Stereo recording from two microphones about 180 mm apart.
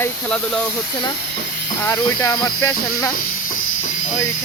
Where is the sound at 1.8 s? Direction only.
20° left (ahead or behind).